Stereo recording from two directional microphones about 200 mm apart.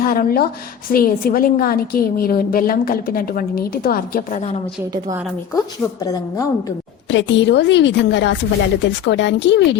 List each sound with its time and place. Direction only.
0.0 s a woman's voice: 45° left (ahead or behind)
5.5 s a woman's voice: 20° left (ahead or behind)
7.1 s a woman's voice: 65° left (ahead or behind)